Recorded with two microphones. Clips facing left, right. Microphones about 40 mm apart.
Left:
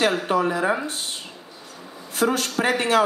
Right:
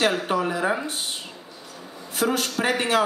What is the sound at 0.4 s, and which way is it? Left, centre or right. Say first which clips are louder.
Speech: left 2 dB; centre.